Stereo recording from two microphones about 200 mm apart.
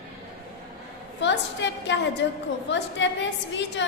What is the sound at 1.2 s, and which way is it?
A woman's voice, 65° left (ahead or behind).